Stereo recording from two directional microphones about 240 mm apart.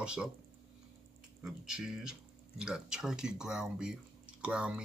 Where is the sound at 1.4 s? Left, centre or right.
Centre.